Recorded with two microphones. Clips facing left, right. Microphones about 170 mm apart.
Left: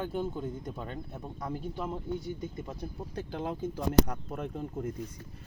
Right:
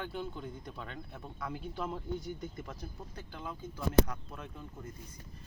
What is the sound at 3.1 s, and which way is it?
Speech, 70° left (ahead or behind).